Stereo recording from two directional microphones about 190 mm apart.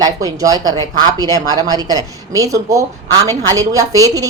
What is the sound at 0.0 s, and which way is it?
A woman's voice, 20° right (ahead or behind).